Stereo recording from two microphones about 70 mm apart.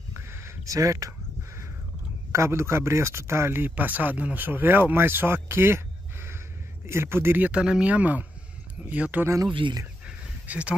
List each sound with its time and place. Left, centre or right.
0.1 s a sound: right
2.3 s speech: right
6.9 s speech: right
9.4 s speech: right
10.4 s speech: centre